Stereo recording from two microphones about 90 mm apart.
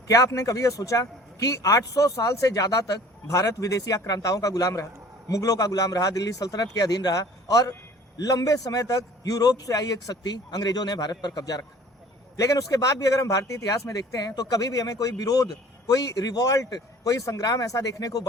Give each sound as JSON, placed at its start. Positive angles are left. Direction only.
{"t": 0.1, "sound": "a man's voice", "side_deg": 35}